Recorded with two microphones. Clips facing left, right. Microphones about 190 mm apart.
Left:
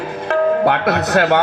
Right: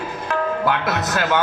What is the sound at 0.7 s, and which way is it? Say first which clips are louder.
Speech: left 5 dB; 60° left (ahead or behind).